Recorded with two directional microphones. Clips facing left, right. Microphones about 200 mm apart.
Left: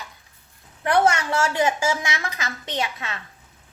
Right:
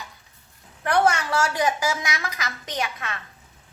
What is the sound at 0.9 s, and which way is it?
A woman's voice, 25° left (ahead or behind).